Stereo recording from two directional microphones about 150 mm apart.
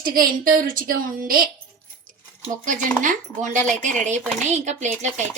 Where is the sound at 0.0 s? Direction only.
70° right (ahead or behind).